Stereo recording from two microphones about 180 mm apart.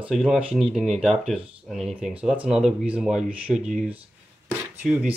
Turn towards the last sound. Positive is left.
turn(degrees=-5)  # may be behind; listen again after turning